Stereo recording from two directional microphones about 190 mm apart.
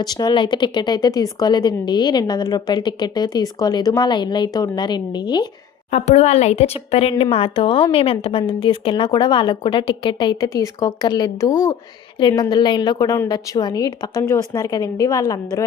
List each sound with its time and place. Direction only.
0.0 s a woman's voice: 20° left (ahead or behind)
5.9 s a woman's voice: 35° left (ahead or behind); by 15.6 s 20° left (ahead or behind)